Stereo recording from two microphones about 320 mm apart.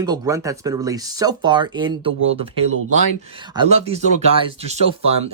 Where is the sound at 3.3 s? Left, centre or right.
Centre.